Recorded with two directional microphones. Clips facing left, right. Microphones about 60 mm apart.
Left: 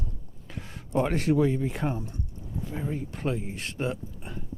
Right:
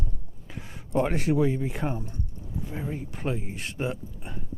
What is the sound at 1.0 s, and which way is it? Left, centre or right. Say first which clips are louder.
Speech: even; centre.